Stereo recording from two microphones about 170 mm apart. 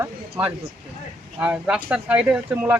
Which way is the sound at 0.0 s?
10° right (ahead or behind).